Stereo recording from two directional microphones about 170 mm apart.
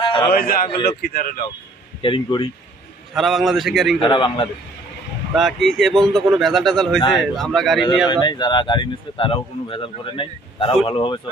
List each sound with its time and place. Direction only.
0.0 s a sound: 35° left (ahead or behind)
0.3 s speech: 60° left (ahead or behind)
2.0 s speech: 30° left (ahead or behind)
3.2 s speech: centre (ahead or behind)
4.0 s speech: 30° left (ahead or behind)
5.3 s speech: centre (ahead or behind)
8.0 s speech: 25° left (ahead or behind)